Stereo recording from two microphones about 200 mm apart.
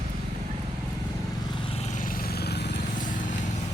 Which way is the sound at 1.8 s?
40° left (ahead or behind).